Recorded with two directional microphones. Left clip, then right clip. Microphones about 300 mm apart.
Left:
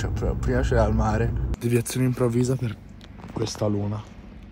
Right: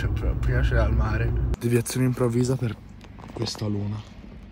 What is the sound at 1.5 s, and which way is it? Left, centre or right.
Speech, centre.